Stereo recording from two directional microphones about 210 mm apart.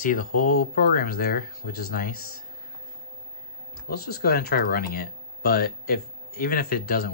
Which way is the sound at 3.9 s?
50° left (ahead or behind).